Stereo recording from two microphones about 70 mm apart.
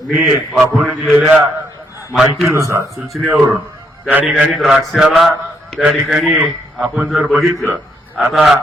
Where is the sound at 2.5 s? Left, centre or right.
Right.